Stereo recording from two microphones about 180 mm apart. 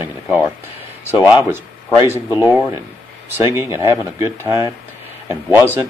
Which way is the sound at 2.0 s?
15° right (ahead or behind).